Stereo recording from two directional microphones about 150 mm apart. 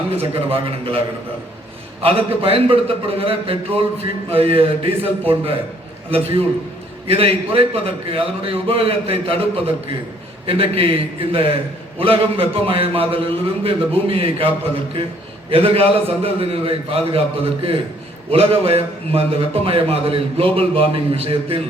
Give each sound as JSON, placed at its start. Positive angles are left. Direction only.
{"t": 0.1, "sound": "a man's voice", "side_deg": -40}